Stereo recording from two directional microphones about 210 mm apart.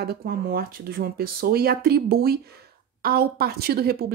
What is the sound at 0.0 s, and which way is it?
Speech, 45° right (ahead or behind).